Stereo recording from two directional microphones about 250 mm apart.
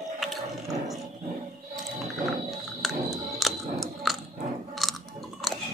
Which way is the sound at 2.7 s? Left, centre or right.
Centre.